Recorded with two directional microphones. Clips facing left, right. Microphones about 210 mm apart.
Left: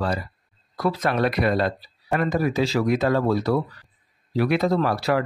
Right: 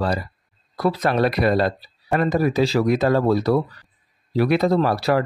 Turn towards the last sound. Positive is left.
turn(degrees=-35)  # may be behind; listen again after turning